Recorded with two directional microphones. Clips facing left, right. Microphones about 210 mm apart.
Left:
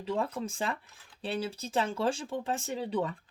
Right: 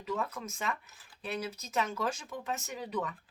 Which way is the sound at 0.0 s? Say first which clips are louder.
Left 4 dB; 30° left (ahead or behind).